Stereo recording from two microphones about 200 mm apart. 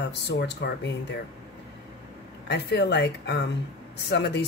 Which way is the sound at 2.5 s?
55° left (ahead or behind).